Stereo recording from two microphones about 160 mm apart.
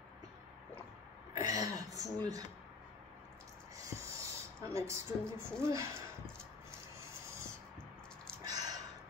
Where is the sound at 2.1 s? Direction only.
25° right (ahead or behind).